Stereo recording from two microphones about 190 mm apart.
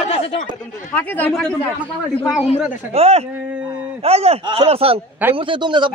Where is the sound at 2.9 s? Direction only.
35° right (ahead or behind).